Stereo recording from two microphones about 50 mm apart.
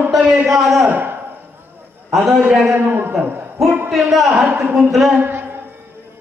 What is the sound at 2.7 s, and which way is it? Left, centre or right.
Speech, right.